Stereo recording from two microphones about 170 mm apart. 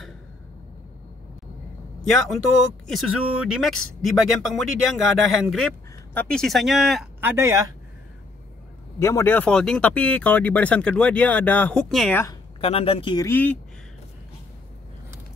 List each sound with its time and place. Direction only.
2.9 s speech: 5° right (ahead or behind)
7.2 s speech: 15° right (ahead or behind)
9.0 s speech: 15° left (ahead or behind)
12.5 s speech: 35° left (ahead or behind)
13.3 s speech: 10° left (ahead or behind)